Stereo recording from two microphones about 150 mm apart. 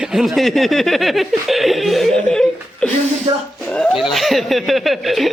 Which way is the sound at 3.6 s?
5° left (ahead or behind).